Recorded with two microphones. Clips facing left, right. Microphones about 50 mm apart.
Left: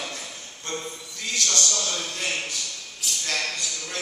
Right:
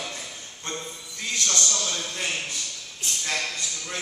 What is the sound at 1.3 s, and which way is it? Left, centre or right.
Speech, right.